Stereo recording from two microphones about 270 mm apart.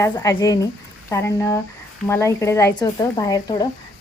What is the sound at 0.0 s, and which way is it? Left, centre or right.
Speech, centre.